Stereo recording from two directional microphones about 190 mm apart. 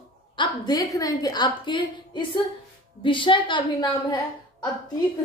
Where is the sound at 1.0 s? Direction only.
20° left (ahead or behind).